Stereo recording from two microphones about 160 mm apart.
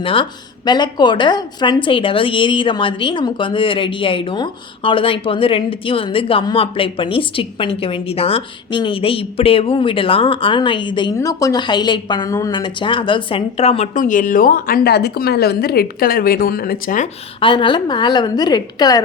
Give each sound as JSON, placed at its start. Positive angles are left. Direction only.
{"t": 0.0, "sound": "speech", "side_deg": 30}
{"t": 17.4, "sound": "a woman's voice", "side_deg": 30}